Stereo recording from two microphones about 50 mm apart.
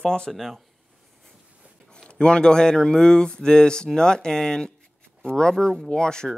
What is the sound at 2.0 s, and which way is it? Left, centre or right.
Speech, centre.